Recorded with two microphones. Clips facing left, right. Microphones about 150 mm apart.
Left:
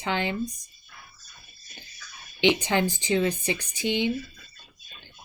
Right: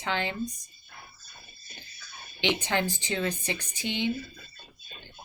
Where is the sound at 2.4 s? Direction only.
15° left (ahead or behind).